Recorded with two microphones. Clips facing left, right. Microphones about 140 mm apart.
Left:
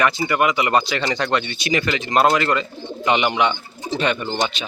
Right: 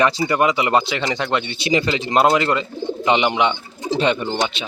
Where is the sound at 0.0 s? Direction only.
30° right (ahead or behind).